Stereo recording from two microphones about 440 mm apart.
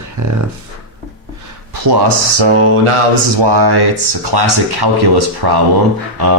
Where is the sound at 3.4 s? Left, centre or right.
Right.